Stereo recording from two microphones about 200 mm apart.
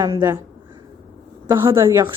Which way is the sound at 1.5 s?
15° right (ahead or behind).